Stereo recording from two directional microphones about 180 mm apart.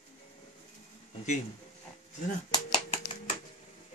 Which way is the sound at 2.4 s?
25° left (ahead or behind).